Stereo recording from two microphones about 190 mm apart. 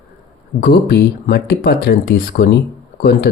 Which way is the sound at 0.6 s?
55° left (ahead or behind).